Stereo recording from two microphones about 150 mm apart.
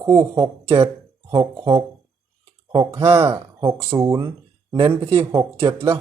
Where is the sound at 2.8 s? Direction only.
20° right (ahead or behind); by 5.1 s 35° right (ahead or behind).